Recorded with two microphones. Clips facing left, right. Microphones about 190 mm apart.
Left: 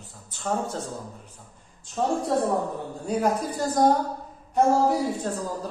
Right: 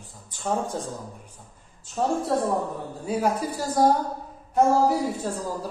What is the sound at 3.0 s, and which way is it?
Speech, 10° right (ahead or behind).